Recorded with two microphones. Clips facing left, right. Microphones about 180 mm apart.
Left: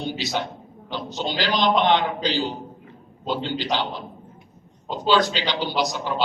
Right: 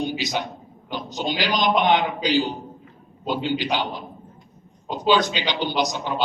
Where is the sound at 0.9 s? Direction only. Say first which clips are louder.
Right 1 dB; 15° right (ahead or behind).